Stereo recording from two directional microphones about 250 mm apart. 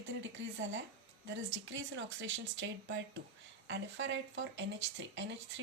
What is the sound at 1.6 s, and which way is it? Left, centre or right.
Speech, right.